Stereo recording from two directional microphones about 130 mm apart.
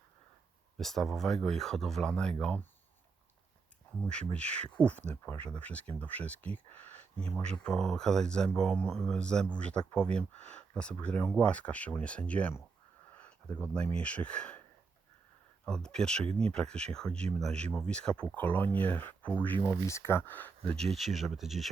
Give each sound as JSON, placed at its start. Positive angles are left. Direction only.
{"t": 0.8, "sound": "speech", "side_deg": 0}
{"t": 4.4, "sound": "speech", "side_deg": 10}
{"t": 15.6, "sound": "speech", "side_deg": 5}
{"t": 20.7, "sound": "speech", "side_deg": 0}